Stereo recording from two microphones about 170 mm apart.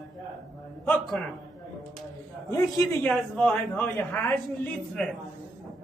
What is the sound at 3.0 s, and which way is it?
A woman's voice, 5° left (ahead or behind).